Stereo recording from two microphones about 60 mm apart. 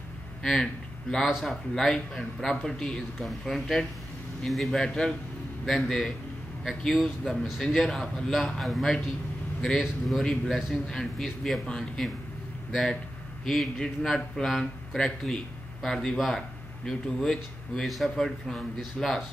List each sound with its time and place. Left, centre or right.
0.4 s speech: centre
13.5 s speech: centre